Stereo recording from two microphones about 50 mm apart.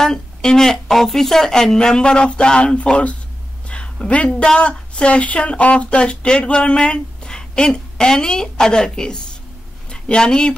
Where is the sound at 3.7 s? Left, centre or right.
Left.